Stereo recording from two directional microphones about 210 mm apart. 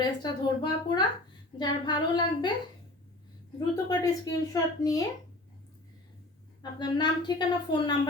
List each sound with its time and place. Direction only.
0.0 s a woman's voice: 20° left (ahead or behind)
3.8 s a woman's voice: 15° left (ahead or behind)
6.6 s a woman's voice: 20° left (ahead or behind)